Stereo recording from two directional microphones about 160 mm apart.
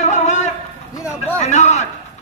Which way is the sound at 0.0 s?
45° left (ahead or behind).